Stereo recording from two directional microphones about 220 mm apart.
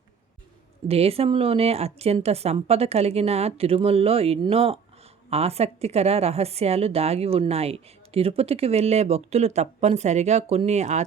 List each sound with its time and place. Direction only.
0.9 s speech: 25° right (ahead or behind)